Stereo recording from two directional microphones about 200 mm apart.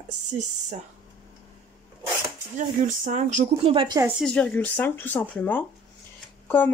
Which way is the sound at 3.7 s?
20° right (ahead or behind).